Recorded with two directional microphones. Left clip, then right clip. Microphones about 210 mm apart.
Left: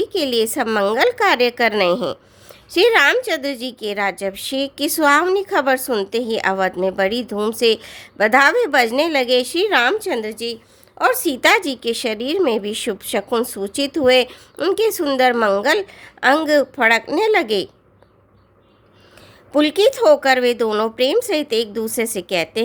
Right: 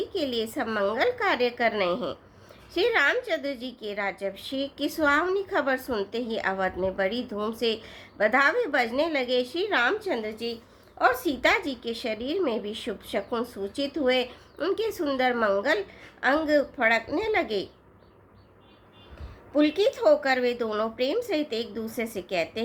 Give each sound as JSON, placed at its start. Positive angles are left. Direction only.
{"t": 0.1, "sound": "a woman's voice", "side_deg": 50}
{"t": 19.5, "sound": "a woman's voice", "side_deg": 50}